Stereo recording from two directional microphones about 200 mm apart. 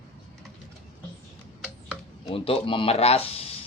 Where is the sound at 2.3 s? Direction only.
25° left (ahead or behind).